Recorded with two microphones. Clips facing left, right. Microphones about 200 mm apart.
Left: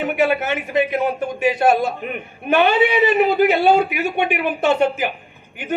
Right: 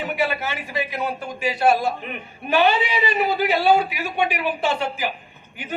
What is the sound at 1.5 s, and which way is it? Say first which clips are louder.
Speech: even; 20° left (ahead or behind).